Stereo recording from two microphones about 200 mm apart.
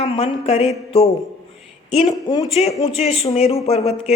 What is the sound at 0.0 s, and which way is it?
A woman's voice, 30° left (ahead or behind).